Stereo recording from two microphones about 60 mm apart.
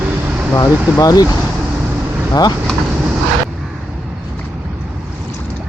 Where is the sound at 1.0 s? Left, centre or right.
Left.